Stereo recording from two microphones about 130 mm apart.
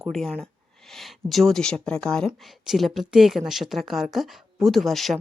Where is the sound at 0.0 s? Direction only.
5° left (ahead or behind).